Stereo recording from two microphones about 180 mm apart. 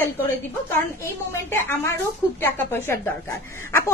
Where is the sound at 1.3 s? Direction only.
15° left (ahead or behind).